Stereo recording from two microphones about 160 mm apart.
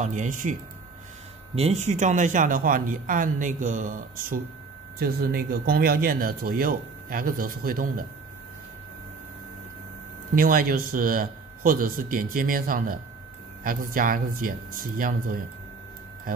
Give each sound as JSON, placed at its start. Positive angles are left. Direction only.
{"t": 0.0, "sound": "speech", "side_deg": -50}
{"t": 1.5, "sound": "speech", "side_deg": -40}
{"t": 4.9, "sound": "speech", "side_deg": -70}
{"t": 10.3, "sound": "speech", "side_deg": -65}